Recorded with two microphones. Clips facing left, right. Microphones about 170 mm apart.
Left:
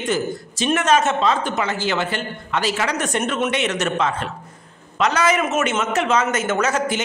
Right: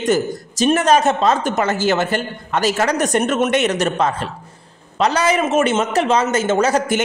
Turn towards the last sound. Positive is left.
turn(degrees=-30)  # may be behind; listen again after turning